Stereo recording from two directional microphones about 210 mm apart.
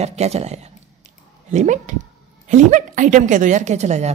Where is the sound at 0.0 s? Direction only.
30° right (ahead or behind).